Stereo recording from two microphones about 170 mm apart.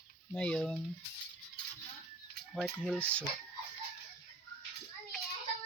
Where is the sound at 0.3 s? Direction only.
5° left (ahead or behind).